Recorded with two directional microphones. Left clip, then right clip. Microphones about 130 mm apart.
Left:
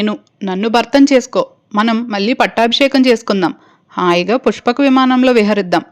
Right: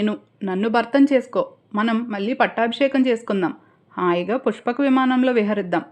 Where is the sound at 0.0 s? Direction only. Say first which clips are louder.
Left 6 dB; 30° left (ahead or behind).